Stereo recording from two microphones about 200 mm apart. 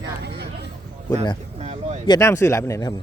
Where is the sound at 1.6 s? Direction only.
35° right (ahead or behind).